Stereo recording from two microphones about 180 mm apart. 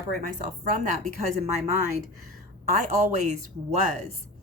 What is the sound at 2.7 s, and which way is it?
A woman's voice, 40° right (ahead or behind).